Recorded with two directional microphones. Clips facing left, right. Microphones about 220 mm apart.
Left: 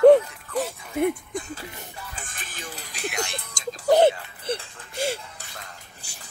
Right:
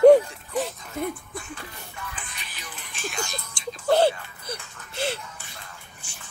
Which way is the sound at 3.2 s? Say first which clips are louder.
Left 2 dB; 35° left (ahead or behind).